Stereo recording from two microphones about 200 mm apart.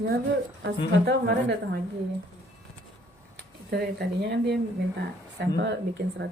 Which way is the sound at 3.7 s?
55° right (ahead or behind).